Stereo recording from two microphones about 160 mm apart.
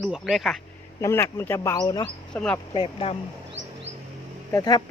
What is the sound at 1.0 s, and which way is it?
Speech, 15° left (ahead or behind).